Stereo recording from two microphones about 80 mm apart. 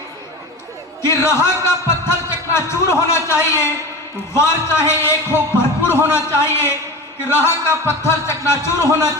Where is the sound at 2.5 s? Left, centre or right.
Left.